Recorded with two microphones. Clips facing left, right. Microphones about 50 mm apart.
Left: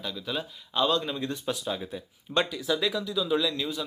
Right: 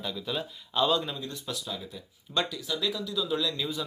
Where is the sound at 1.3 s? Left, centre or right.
Left.